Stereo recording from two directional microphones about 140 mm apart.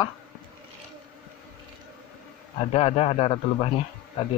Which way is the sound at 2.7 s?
45° left (ahead or behind).